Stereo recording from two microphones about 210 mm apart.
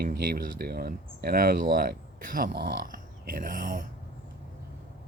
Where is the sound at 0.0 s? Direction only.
50° right (ahead or behind).